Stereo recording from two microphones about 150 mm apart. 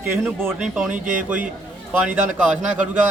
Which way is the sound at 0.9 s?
60° right (ahead or behind).